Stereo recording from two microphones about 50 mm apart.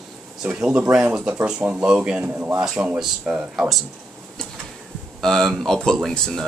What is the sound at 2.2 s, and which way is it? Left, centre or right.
Speech, right.